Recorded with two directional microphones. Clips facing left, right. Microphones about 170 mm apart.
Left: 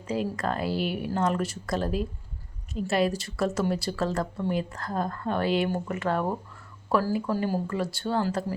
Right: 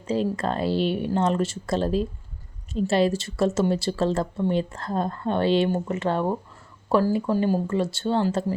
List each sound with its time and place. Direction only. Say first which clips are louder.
0.1 s speech: right 4 dB; 25° right (ahead or behind)